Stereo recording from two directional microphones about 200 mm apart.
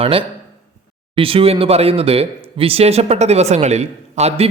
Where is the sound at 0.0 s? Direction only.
25° right (ahead or behind).